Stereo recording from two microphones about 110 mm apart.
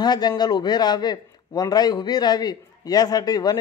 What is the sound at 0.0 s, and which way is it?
A man's voice, 40° left (ahead or behind).